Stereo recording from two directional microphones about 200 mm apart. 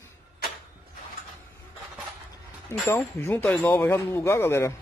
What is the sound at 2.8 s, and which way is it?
Speech, 10° left (ahead or behind).